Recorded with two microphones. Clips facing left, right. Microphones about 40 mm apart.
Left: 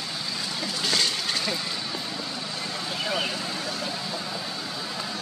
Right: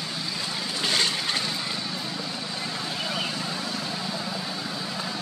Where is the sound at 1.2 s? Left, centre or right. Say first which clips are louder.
Even; centre.